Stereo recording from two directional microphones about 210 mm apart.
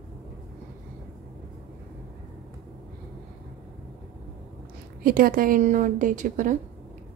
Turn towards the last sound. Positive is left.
turn(degrees=-35)  # may be behind; listen again after turning